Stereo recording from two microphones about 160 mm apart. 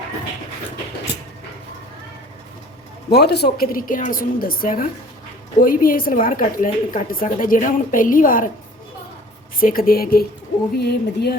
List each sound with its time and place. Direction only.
3.1 s a woman's voice: 90° left; by 8.4 s 60° left (ahead or behind)
9.6 s a woman's voice: 65° left (ahead or behind)
10.8 s speech: 90° left